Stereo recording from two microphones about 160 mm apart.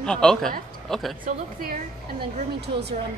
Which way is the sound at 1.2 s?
65° right (ahead or behind).